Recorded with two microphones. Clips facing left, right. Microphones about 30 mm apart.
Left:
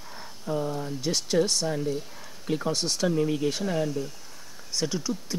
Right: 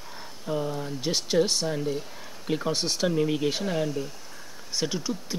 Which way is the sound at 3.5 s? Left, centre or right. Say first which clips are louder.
Even; centre.